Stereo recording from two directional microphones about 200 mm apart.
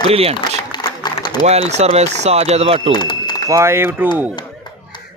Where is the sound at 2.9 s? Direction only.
20° left (ahead or behind).